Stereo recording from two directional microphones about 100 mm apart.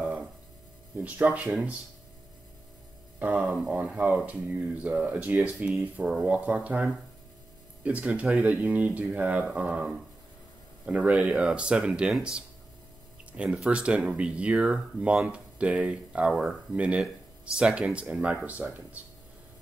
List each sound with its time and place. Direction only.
1.0 s speech: 15° right (ahead or behind)
3.2 s speech: 15° right (ahead or behind)